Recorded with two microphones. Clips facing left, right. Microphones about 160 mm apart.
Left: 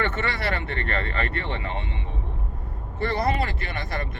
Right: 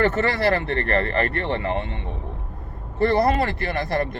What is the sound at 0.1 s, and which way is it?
Speech, 35° right (ahead or behind).